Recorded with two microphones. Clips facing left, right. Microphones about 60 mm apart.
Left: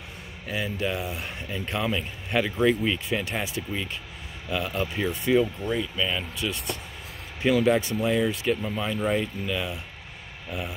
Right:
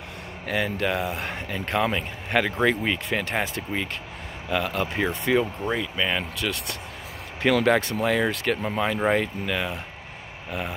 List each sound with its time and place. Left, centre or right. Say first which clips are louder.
0.5 s speech: right 4 dB; right
7.4 s speech: right 1 dB; right